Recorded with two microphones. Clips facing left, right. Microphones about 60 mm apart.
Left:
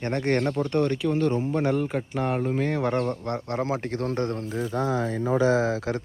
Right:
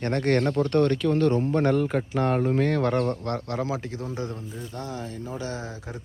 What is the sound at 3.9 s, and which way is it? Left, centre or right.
Speech, left.